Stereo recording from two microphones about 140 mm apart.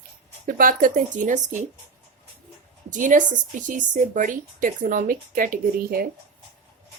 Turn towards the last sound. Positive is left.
turn(degrees=-85)